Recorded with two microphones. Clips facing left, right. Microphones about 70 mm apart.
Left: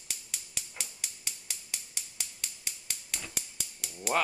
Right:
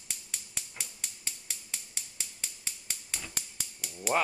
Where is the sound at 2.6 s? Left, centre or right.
Centre.